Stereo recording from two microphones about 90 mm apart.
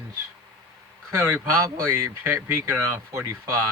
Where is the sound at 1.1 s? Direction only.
30° right (ahead or behind).